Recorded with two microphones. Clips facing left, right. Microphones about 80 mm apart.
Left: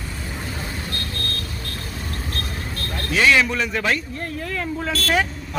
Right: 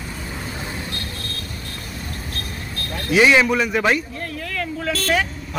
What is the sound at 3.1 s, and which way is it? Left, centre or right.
Speech, centre.